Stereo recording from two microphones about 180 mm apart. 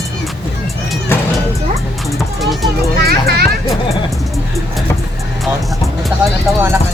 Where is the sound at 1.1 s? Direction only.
15° left (ahead or behind).